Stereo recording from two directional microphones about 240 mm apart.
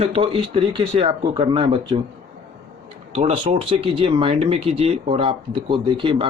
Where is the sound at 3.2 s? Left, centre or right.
Right.